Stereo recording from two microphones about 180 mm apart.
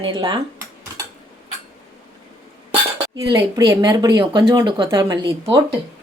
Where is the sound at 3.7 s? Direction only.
20° right (ahead or behind).